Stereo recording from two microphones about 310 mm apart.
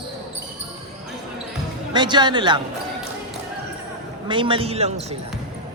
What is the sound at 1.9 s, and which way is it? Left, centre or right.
Speech, centre.